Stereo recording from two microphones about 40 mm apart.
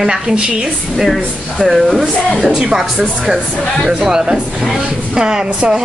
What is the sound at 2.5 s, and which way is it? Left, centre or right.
Speech, centre.